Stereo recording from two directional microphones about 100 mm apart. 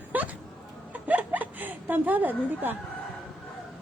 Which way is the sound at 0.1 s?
15° right (ahead or behind).